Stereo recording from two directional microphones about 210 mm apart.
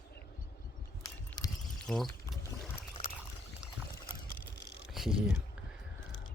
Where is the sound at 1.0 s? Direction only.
15° left (ahead or behind).